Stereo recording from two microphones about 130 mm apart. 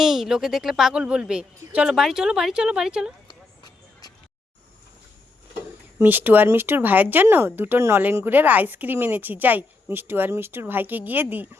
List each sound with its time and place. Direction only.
0.0 s a woman's voice: 5° right (ahead or behind)
3.2 s a sound: 30° left (ahead or behind)
6.0 s speech: 15° right (ahead or behind)